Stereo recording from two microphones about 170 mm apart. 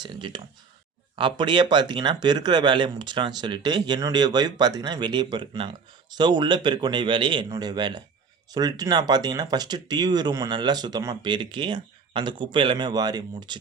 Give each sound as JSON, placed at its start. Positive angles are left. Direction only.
{"t": 0.0, "sound": "speech", "side_deg": -30}